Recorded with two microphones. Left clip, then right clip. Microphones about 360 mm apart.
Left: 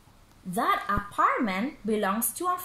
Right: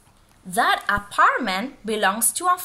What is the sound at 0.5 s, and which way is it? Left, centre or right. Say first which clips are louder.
Speech: right 6 dB; right.